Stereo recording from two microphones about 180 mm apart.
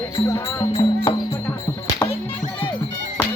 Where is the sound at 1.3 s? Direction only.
20° left (ahead or behind).